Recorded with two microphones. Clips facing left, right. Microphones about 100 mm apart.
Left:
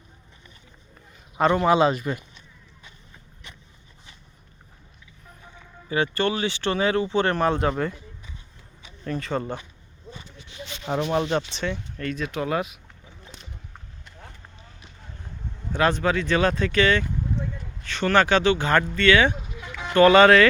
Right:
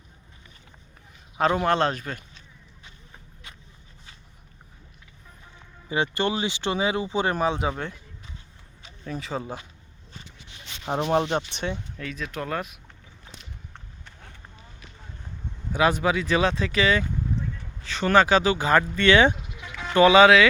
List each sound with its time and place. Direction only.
1.6 s speech: 5° left (ahead or behind)
5.9 s speech: 20° right (ahead or behind); by 7.9 s centre (ahead or behind)
9.0 s speech: 5° right (ahead or behind)
10.8 s speech: 30° right (ahead or behind)
11.9 s speech: centre (ahead or behind)
15.7 s speech: 10° right (ahead or behind)
19.0 s speech: 20° right (ahead or behind)
19.6 s a sound: centre (ahead or behind)
19.9 s speech: 10° right (ahead or behind)